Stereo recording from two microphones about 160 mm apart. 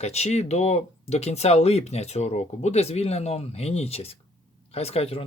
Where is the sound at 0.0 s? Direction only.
40° left (ahead or behind).